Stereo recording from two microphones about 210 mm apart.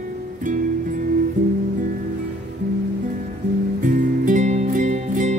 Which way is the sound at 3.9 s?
40° right (ahead or behind).